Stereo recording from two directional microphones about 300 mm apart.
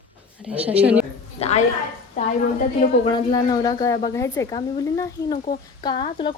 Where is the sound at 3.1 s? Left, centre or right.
Centre.